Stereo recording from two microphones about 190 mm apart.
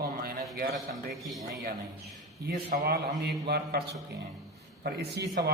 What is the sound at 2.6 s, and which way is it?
Speech, 50° right (ahead or behind).